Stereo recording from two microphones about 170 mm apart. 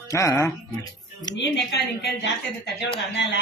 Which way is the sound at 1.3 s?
85° left.